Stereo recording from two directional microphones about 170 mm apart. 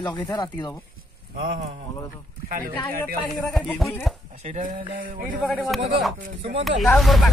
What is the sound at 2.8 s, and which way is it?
Speech, 5° left (ahead or behind).